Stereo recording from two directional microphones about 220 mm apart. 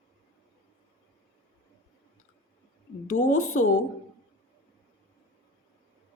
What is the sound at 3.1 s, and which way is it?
Speech, 40° left (ahead or behind).